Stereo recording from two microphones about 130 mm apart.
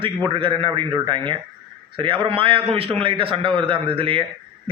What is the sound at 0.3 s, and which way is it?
A man's voice, 40° right (ahead or behind).